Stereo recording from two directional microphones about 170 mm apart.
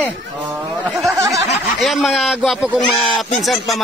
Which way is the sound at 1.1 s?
20° right (ahead or behind).